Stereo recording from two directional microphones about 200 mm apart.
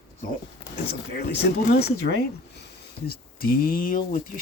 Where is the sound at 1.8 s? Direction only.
55° left (ahead or behind).